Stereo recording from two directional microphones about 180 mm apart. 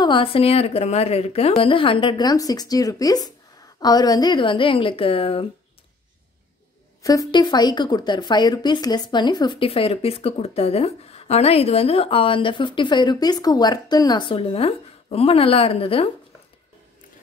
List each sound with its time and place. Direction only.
0.0 s a woman's voice: 30° left (ahead or behind)
7.0 s a woman's voice: 20° left (ahead or behind)